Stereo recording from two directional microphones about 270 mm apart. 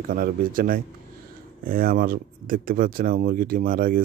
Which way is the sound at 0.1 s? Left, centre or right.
Right.